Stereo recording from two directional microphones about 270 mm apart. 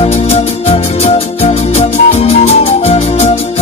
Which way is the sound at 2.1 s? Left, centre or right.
Left.